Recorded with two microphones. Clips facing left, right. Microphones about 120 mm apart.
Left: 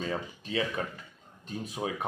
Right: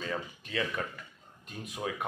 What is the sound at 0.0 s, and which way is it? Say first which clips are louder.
Speech: left 3 dB; 25° left (ahead or behind).